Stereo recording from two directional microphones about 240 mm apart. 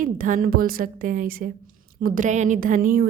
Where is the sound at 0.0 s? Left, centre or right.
Right.